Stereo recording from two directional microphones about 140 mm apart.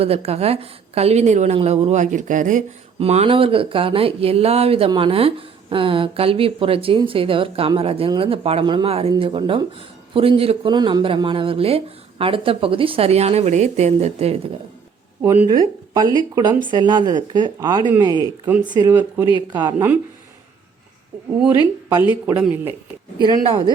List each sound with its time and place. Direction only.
0.0 s speech: 45° right (ahead or behind); by 2.6 s 65° right (ahead or behind)
3.0 s speech: 45° right (ahead or behind)
15.2 s speech: 15° right (ahead or behind)
15.4 s speech: 30° right (ahead or behind)
18.4 s speech: 10° right (ahead or behind)
18.7 s speech: 25° right (ahead or behind)
18.9 s speech: 15° right (ahead or behind)
22.1 s speech: 10° right (ahead or behind)
23.2 s speech: 35° right (ahead or behind)